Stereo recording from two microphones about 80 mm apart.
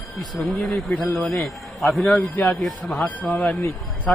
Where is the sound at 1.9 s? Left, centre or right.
Centre.